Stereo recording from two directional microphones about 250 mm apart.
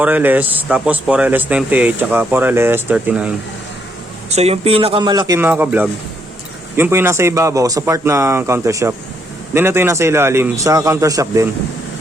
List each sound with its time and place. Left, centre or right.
0.0 s speech: centre
4.3 s speech: right